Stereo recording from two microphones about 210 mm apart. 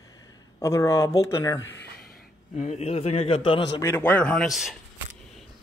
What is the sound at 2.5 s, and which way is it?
A man's voice, 30° left (ahead or behind).